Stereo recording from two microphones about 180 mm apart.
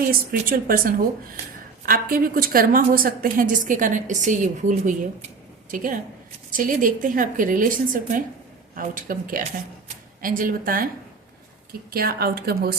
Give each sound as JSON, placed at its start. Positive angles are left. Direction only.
{"t": 0.0, "sound": "a woman's voice", "side_deg": -55}
{"t": 11.9, "sound": "a woman's voice", "side_deg": -55}